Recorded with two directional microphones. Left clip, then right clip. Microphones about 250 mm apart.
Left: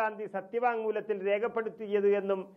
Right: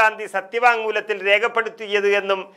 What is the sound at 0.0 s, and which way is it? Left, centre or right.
A man's voice, centre.